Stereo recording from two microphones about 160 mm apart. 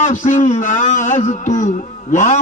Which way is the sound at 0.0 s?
50° left (ahead or behind).